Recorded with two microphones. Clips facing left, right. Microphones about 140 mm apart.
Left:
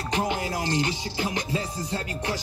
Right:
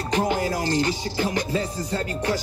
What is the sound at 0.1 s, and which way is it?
Music, 40° right (ahead or behind).